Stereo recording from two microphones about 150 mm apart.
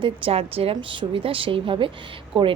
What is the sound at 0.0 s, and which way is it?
A woman's voice, 40° right (ahead or behind).